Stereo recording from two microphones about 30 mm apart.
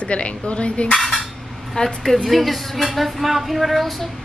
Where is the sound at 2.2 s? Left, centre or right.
Centre.